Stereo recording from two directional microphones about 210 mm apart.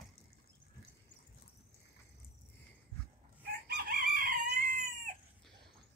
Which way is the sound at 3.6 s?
45° right (ahead or behind).